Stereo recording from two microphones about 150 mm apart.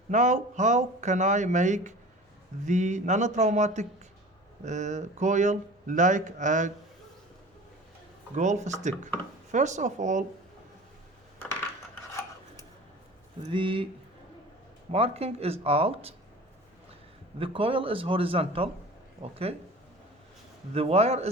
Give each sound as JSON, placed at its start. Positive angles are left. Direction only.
{"t": 0.1, "sound": "speech", "side_deg": -55}
{"t": 8.4, "sound": "speech", "side_deg": -50}
{"t": 13.5, "sound": "speech", "side_deg": -35}
{"t": 14.8, "sound": "speech", "side_deg": -40}
{"t": 17.4, "sound": "speech", "side_deg": -35}
{"t": 20.7, "sound": "speech", "side_deg": -45}